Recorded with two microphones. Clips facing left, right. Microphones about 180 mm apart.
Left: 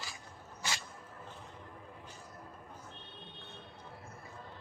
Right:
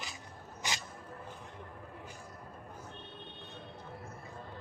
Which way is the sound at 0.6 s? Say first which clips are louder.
Right 1 dB; 15° right (ahead or behind).